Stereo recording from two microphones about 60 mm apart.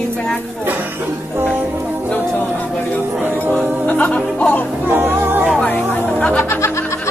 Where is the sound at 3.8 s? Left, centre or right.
Left.